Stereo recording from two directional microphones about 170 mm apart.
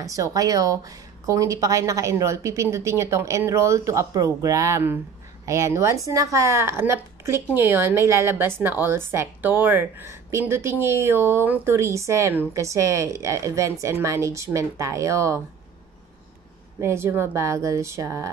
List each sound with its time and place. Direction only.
0.0 s a woman's voice: 20° right (ahead or behind)
16.8 s a woman's voice: 15° right (ahead or behind)